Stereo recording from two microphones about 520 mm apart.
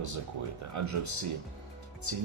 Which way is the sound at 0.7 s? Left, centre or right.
Right.